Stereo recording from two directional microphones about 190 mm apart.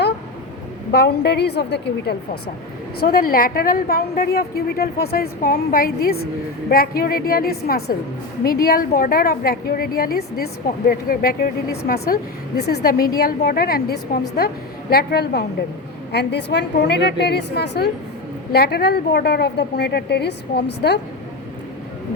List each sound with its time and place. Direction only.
0.9 s a woman's voice: 60° left (ahead or behind)